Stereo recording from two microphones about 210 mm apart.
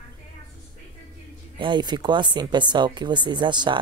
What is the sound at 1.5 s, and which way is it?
Speech, 20° right (ahead or behind).